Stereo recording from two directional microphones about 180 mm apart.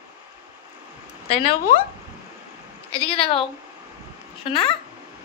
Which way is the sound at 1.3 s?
30° left (ahead or behind).